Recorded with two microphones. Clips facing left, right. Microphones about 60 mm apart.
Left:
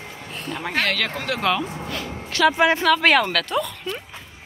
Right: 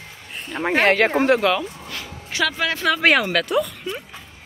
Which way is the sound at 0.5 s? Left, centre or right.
Right.